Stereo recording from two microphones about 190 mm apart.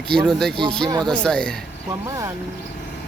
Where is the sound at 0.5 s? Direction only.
25° right (ahead or behind).